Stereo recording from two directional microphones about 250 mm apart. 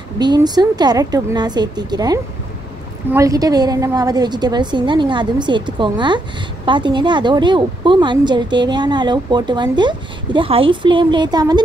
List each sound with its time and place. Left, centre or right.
0.2 s a woman's voice: centre